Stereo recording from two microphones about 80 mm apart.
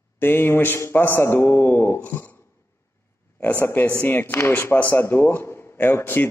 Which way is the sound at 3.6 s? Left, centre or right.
Left.